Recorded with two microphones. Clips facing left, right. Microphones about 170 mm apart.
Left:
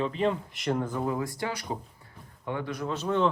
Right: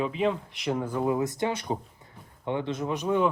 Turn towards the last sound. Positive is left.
turn(degrees=-15)  # may be behind; listen again after turning